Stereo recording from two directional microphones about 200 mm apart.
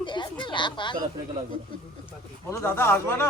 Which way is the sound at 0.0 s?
25° left (ahead or behind).